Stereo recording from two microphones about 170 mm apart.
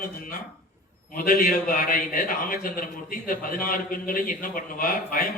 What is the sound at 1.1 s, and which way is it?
A man's voice, 55° left (ahead or behind).